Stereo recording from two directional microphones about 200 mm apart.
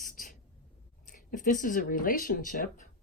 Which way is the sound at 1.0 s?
40° left (ahead or behind).